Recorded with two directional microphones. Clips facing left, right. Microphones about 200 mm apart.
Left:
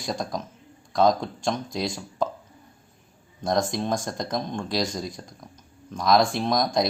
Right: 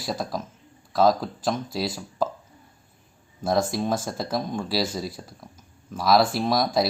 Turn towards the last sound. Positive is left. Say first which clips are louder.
# right 1 dB
turn(degrees=-5)  # may be behind; listen again after turning